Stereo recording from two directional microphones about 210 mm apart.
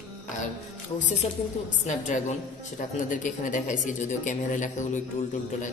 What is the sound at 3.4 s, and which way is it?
Speech, 40° left (ahead or behind).